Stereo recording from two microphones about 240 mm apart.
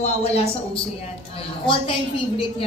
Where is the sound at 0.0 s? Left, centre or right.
Left.